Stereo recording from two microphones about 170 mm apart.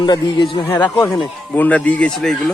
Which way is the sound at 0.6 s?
15° left (ahead or behind).